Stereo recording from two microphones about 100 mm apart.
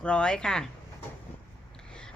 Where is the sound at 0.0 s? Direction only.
10° left (ahead or behind).